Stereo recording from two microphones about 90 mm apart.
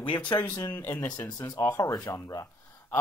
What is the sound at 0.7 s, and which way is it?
Speech, 25° left (ahead or behind).